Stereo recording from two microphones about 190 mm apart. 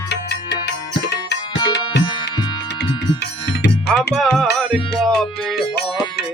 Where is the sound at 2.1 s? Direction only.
25° left (ahead or behind).